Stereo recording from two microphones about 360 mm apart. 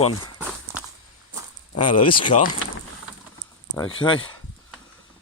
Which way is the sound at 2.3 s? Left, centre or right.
Left.